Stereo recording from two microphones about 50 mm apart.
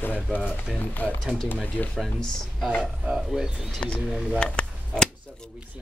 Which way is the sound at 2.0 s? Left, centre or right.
Centre.